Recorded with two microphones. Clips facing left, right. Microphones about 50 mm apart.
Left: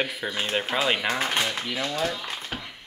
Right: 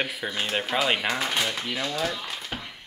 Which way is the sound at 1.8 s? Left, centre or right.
Centre.